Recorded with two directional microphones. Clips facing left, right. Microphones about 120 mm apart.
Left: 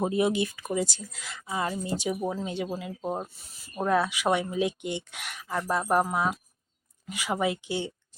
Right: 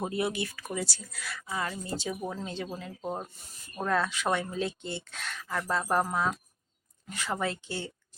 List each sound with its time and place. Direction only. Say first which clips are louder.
0.0 s speech: left 6 dB; 20° left (ahead or behind)
3.3 s speech: right 1 dB; centre (ahead or behind)
3.8 s speech: left 4 dB; 15° left (ahead or behind)